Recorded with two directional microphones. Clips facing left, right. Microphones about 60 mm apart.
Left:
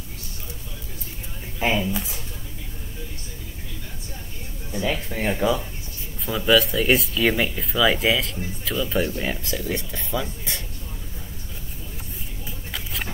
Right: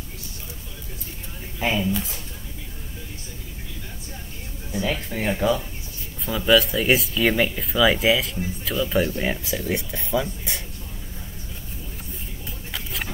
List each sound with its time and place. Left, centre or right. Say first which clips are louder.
1.6 s speech: even; centre
4.6 s speech: even; centre
12.7 s a sound: even; centre